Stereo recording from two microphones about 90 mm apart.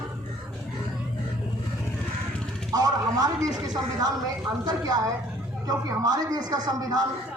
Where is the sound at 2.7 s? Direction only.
45° right (ahead or behind).